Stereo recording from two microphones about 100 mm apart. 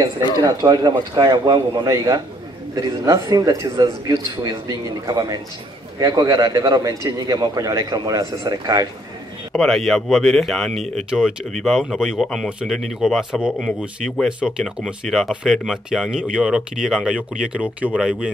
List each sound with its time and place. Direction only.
0.5 s a man's voice: 40° right (ahead or behind)
9.5 s speech: centre (ahead or behind)